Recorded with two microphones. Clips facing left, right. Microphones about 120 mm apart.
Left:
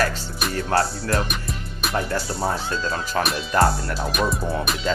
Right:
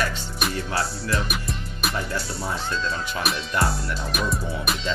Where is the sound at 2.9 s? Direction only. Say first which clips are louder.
Left 3 dB; 45° left (ahead or behind).